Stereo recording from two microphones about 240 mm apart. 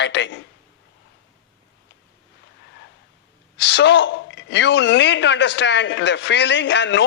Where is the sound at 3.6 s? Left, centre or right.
Left.